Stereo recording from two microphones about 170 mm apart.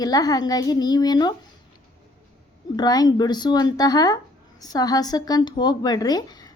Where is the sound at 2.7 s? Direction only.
25° left (ahead or behind).